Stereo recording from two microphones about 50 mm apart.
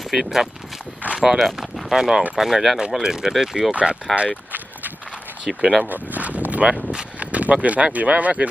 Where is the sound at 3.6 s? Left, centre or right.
Right.